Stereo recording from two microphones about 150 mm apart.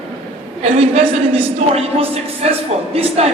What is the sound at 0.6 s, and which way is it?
A man's voice, 40° right (ahead or behind).